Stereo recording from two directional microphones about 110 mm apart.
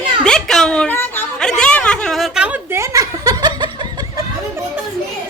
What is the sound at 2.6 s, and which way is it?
Chuckle, 25° right (ahead or behind).